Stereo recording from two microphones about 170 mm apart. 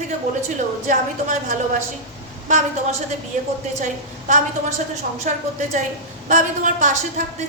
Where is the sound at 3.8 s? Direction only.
45° right (ahead or behind).